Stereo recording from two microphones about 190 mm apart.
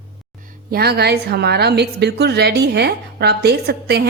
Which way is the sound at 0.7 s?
55° right (ahead or behind).